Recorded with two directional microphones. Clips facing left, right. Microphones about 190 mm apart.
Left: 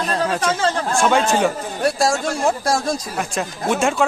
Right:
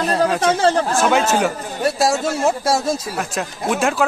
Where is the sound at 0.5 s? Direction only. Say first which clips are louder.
Right 4 dB; 35° right (ahead or behind).